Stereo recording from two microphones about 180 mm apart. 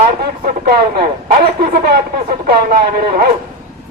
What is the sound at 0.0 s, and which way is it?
Speech, 55° right (ahead or behind).